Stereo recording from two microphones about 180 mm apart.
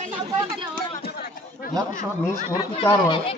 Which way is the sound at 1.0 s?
60° left (ahead or behind).